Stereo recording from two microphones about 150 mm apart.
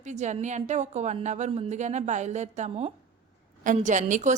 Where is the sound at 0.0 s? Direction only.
50° right (ahead or behind).